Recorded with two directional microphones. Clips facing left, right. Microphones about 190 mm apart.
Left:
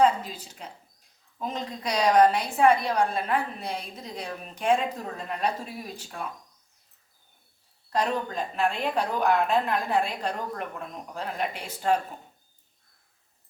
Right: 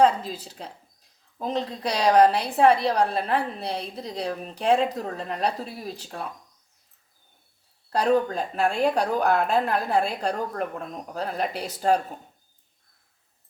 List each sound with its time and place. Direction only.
0.0 s a woman's voice: 35° right (ahead or behind)
7.9 s a woman's voice: 40° right (ahead or behind)